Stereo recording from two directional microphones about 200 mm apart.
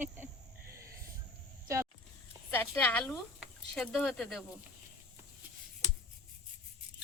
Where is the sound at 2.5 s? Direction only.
10° left (ahead or behind).